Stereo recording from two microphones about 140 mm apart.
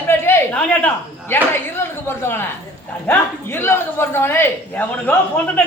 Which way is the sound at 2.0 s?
15° left (ahead or behind).